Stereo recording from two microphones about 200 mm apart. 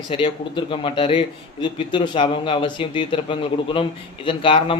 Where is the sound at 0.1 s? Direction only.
25° left (ahead or behind).